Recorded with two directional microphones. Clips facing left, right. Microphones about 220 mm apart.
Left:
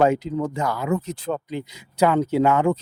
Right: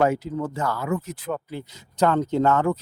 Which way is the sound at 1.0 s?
30° left (ahead or behind).